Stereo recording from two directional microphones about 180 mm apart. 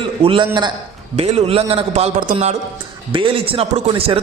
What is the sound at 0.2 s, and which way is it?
A woman's voice, 30° right (ahead or behind).